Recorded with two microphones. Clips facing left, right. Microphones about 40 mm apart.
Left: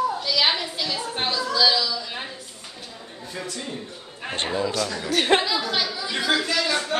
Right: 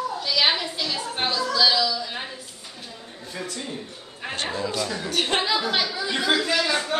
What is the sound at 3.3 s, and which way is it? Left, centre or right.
Speech, centre.